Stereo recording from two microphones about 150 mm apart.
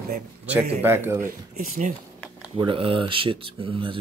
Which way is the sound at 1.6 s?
60° right (ahead or behind).